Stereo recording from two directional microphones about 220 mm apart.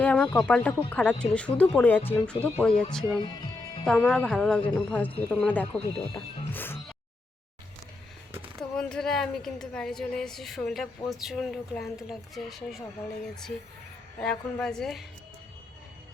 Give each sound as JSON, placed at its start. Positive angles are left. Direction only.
{"t": 0.0, "sound": "speech", "side_deg": 5}
{"t": 3.8, "sound": "speech", "side_deg": 0}
{"t": 4.6, "sound": "speech", "side_deg": 20}
{"t": 4.9, "sound": "speech", "side_deg": 5}
{"t": 6.1, "sound": "music", "side_deg": 10}
{"t": 8.7, "sound": "speech", "side_deg": 5}
{"t": 14.2, "sound": "speech", "side_deg": 5}